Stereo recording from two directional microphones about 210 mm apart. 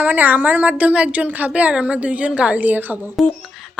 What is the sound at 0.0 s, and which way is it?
Speech, 10° right (ahead or behind).